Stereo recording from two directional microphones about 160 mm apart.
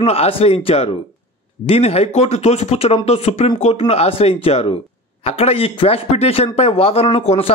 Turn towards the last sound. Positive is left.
turn(degrees=35)  # may be behind; listen again after turning